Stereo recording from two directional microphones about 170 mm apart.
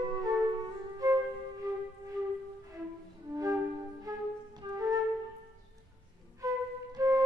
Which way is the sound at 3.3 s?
20° right (ahead or behind).